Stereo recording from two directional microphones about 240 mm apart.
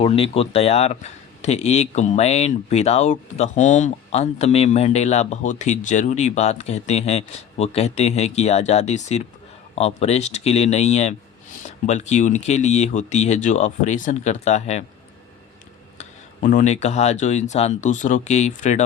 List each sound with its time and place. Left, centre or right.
0.0 s speech: left
16.0 s speech: left